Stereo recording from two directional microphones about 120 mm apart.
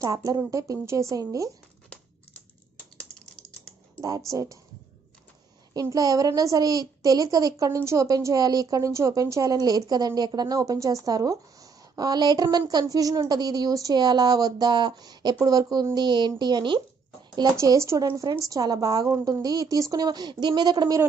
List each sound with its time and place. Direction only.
0.0 s a woman's voice: 30° right (ahead or behind)
4.3 s a woman's voice: 25° right (ahead or behind)
5.7 s a child's voice: 30° right (ahead or behind)
17.6 s a woman's voice: 25° right (ahead or behind)